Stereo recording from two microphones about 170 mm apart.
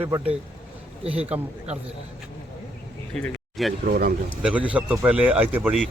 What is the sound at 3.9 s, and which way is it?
Speech, 60° right (ahead or behind).